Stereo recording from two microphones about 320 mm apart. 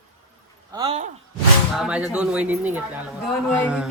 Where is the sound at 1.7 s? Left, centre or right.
Centre.